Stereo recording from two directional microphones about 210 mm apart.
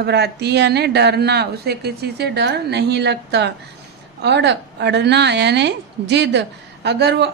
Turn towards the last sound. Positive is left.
turn(degrees=-50)  # may be behind; listen again after turning